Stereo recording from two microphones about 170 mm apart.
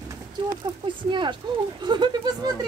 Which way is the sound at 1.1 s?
30° right (ahead or behind).